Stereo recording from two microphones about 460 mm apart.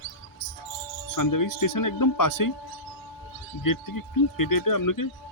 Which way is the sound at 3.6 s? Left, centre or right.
Left.